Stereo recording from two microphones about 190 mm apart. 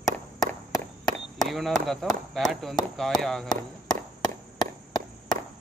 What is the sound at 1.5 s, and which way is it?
Speech, centre (ahead or behind).